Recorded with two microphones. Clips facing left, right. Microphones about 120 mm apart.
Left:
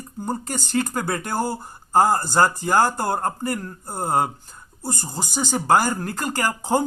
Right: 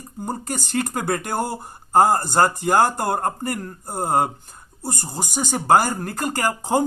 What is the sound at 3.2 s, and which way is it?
Speech, 35° right (ahead or behind).